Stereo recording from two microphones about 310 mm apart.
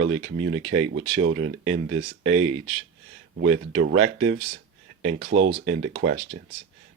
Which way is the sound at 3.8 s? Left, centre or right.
Right.